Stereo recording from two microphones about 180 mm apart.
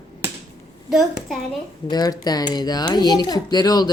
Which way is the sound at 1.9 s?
20° left (ahead or behind).